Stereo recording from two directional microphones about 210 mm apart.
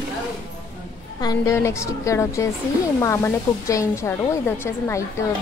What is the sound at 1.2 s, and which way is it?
Speech, 15° left (ahead or behind).